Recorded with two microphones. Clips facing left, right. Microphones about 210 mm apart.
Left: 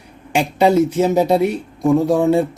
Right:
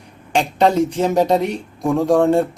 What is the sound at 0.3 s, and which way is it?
Speech, 10° left (ahead or behind).